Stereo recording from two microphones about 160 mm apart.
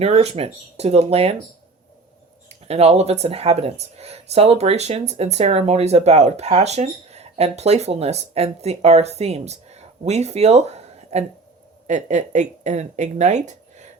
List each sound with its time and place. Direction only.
0.0 s speech: 40° right (ahead or behind)
2.5 s speech: 40° right (ahead or behind)